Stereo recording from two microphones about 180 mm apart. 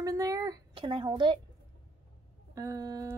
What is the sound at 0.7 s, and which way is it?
Speech, 30° right (ahead or behind).